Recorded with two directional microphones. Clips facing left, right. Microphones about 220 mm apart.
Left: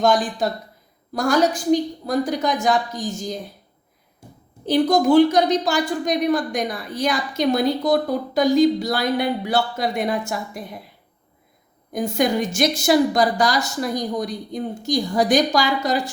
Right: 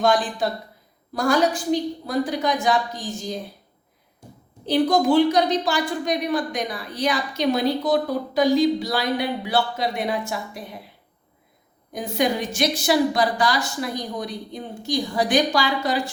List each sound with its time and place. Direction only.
0.0 s a woman's voice: 45° left (ahead or behind)
4.6 s a woman's voice: 45° left (ahead or behind)
11.9 s a woman's voice: 45° left (ahead or behind)